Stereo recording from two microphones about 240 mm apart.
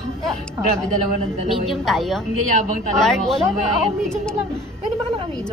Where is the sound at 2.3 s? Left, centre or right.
Left.